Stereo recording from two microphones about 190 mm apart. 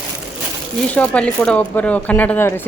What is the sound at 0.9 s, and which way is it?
Speech, 5° left (ahead or behind).